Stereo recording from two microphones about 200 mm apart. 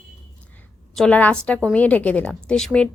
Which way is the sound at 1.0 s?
5° left (ahead or behind).